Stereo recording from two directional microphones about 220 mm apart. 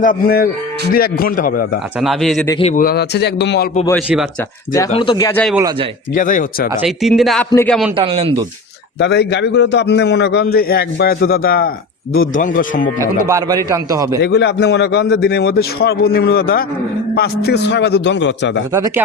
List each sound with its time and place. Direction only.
0.0 s a man's voice: 40° left (ahead or behind)
2.0 s speech: centre (ahead or behind)
2.5 s a man's voice: 25° left (ahead or behind)
2.7 s a man's voice: 45° left (ahead or behind)
3.9 s speech: 5° right (ahead or behind)
4.9 s speech: 25° left (ahead or behind); by 5.5 s 5° left (ahead or behind)
6.1 s a man's voice: 35° left (ahead or behind)
6.8 s speech: centre (ahead or behind)
7.9 s speech: 25° right (ahead or behind)
9.0 s a man's voice: 50° left (ahead or behind)
13.2 s a man's voice: 15° right (ahead or behind)
14.2 s a man's voice: 50° left (ahead or behind)
18.7 s a man's voice: 15° right (ahead or behind)